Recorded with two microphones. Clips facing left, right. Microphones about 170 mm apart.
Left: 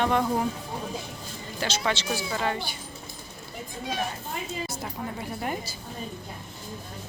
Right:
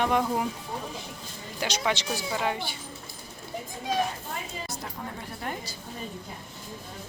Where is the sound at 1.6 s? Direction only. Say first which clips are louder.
Even; 15° right (ahead or behind).